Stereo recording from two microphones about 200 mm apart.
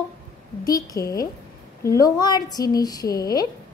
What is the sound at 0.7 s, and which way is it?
A woman's voice, 15° left (ahead or behind).